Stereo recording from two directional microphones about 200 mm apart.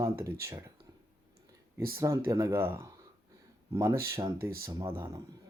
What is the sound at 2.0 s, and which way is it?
Speech, 15° right (ahead or behind).